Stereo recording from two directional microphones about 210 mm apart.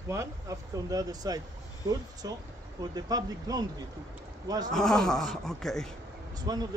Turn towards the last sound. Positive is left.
turn(degrees=-20)  # may be behind; listen again after turning